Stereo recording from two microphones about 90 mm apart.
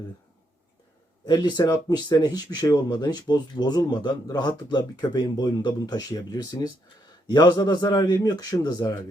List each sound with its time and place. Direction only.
1.3 s speech: 55° left (ahead or behind)